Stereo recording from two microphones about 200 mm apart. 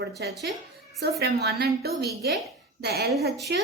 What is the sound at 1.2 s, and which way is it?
Speech, 50° right (ahead or behind).